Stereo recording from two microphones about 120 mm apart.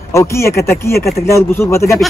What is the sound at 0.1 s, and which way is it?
Speech, 25° left (ahead or behind).